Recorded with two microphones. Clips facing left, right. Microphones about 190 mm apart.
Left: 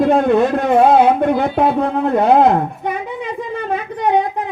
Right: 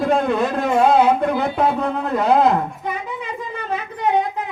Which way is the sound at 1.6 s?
60° left (ahead or behind).